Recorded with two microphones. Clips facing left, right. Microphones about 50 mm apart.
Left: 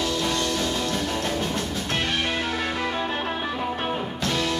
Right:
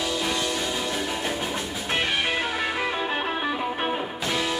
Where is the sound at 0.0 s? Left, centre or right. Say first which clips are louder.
Left 1 dB; centre.